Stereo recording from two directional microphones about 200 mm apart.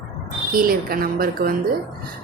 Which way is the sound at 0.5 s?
45° right (ahead or behind).